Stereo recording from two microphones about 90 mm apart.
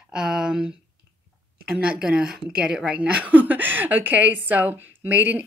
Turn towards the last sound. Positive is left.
turn(degrees=-20)  # may be behind; listen again after turning